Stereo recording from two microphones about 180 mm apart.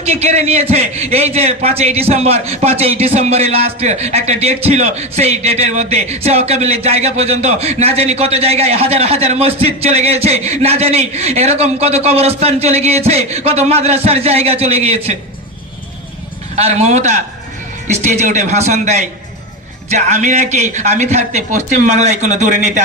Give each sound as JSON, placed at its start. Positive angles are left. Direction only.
{"t": 0.0, "sound": "a man's voice", "side_deg": -35}
{"t": 16.6, "sound": "a man's voice", "side_deg": -35}